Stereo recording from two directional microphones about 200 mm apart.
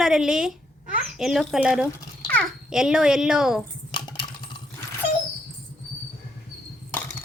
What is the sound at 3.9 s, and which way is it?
Coin, 20° left (ahead or behind).